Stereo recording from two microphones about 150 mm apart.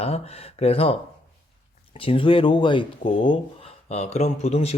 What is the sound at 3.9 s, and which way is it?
Speech, 45° left (ahead or behind).